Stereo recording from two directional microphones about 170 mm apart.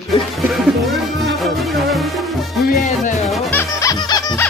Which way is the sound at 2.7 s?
45° left (ahead or behind).